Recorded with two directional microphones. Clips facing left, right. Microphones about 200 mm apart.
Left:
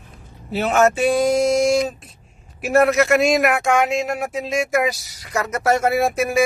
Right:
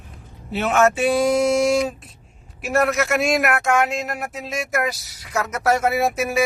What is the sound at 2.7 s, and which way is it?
Speech, centre (ahead or behind).